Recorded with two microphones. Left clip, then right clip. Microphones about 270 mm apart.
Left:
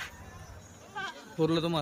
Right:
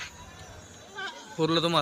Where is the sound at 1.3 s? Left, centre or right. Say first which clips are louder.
Right 3 dB; centre.